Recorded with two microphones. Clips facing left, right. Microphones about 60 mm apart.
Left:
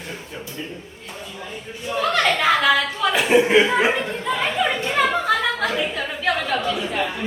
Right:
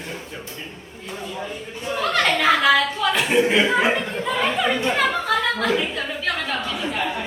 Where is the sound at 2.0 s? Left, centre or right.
Centre.